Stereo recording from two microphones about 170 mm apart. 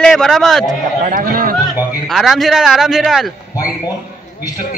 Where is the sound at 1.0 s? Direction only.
55° right (ahead or behind).